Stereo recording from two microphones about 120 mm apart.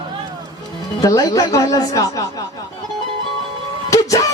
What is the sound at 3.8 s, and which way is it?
Music, 30° left (ahead or behind).